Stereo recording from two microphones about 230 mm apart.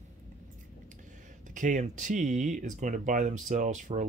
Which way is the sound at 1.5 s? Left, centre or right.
Right.